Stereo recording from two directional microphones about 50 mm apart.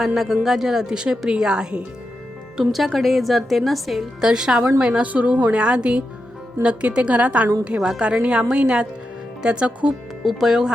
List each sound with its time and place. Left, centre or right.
0.0 s a woman's voice: centre
2.6 s a woman's voice: centre
4.2 s a woman's voice: centre
5.0 s a woman's voice: right
7.8 s a woman's voice: centre
10.2 s speech: centre